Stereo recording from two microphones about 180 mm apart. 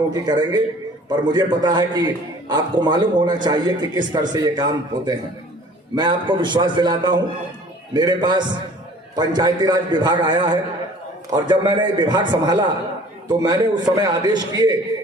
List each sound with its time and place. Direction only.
0.1 s a man's voice: 25° right (ahead or behind)